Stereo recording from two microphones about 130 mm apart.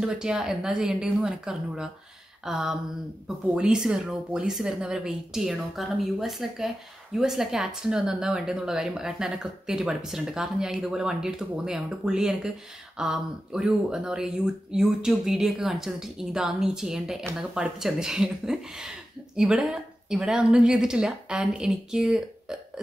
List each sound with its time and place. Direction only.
0.0 s a woman's voice: 5° right (ahead or behind)